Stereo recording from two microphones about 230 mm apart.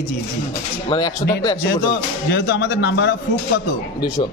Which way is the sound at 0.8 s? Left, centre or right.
Centre.